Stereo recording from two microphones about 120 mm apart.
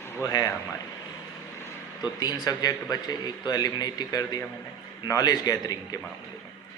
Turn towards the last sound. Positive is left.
turn(degrees=30)  # may be behind; listen again after turning